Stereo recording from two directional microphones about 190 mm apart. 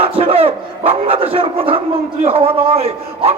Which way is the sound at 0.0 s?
30° right (ahead or behind).